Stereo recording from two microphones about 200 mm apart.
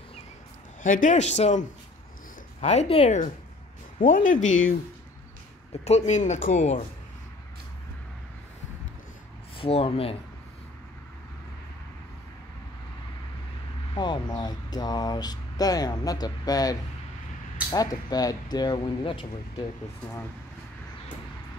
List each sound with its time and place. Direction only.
0.8 s speech: 40° left (ahead or behind)
5.7 s speech: 30° left (ahead or behind)
9.6 s speech: 30° left (ahead or behind)
13.9 s speech: 20° left (ahead or behind)